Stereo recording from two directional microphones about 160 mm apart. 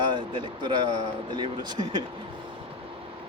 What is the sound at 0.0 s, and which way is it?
Speech, 30° right (ahead or behind).